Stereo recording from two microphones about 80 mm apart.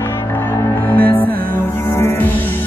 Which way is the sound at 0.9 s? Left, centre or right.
Centre.